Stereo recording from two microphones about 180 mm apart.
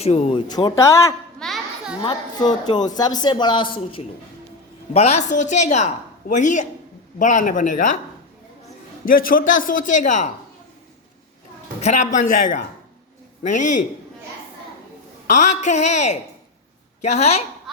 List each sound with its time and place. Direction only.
0.0 s speech: 35° left (ahead or behind); by 1.1 s 15° left (ahead or behind)
1.4 s music: centre (ahead or behind)
2.0 s a woman's voice: 25° left (ahead or behind); by 7.9 s 45° left (ahead or behind)
9.0 s speech: 50° left (ahead or behind)
11.8 s a woman's voice: 40° left (ahead or behind)
15.3 s a woman's voice: 40° left (ahead or behind)